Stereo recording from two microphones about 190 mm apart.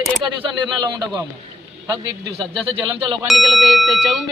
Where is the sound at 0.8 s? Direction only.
20° right (ahead or behind).